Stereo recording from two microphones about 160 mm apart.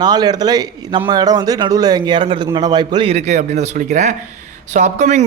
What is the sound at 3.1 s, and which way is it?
A man's voice, 45° right (ahead or behind).